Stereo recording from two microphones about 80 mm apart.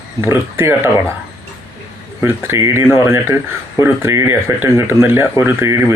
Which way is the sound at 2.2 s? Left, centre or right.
Right.